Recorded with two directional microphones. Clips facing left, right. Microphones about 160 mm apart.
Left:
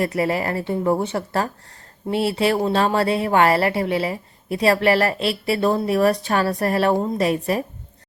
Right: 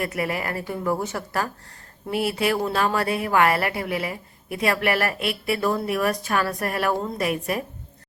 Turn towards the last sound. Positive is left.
turn(degrees=30)  # may be behind; listen again after turning